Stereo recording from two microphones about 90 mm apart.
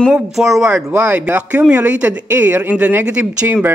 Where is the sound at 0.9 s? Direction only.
20° right (ahead or behind).